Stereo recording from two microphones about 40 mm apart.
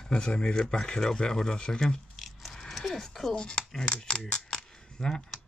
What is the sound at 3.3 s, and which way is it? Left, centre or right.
Speech, left.